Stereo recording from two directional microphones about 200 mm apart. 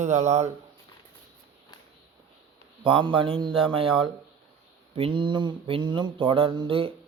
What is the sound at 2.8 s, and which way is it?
Speech, 25° right (ahead or behind).